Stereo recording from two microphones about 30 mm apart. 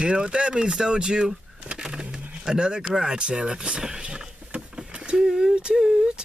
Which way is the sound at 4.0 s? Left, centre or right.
Right.